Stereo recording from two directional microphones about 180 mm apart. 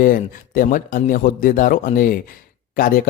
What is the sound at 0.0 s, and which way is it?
Speech, 50° left (ahead or behind).